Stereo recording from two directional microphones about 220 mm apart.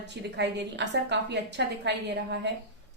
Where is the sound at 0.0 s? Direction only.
50° right (ahead or behind).